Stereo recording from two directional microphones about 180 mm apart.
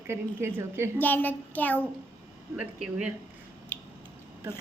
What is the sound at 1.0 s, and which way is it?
Speech, 10° left (ahead or behind).